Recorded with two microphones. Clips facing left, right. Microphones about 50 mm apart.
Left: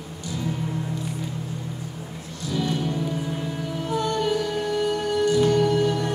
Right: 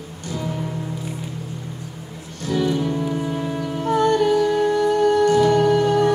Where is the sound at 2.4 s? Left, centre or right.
Right.